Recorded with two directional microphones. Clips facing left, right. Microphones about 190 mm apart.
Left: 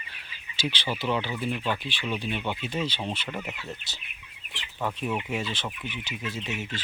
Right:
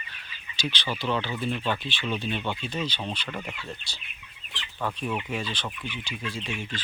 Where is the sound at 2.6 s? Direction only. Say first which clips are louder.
Left 1 dB; 25° left (ahead or behind).